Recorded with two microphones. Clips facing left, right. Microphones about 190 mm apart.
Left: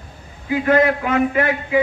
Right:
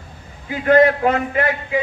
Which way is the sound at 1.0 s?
40° right (ahead or behind).